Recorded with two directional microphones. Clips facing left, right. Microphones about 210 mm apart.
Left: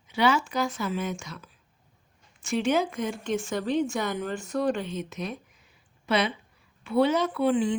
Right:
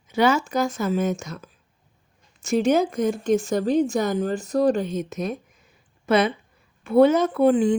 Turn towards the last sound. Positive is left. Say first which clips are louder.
# right 6 dB
turn(degrees=-45)  # may be behind; listen again after turning